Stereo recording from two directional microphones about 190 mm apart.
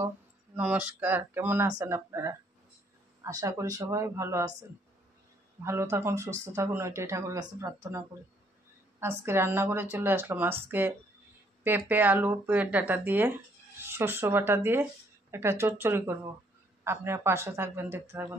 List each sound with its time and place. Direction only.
0.6 s speech: 5° right (ahead or behind)
5.6 s speech: 15° right (ahead or behind)
9.0 s speech: 10° right (ahead or behind)